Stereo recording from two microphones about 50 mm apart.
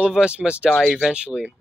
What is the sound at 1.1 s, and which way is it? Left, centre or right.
Speech, centre.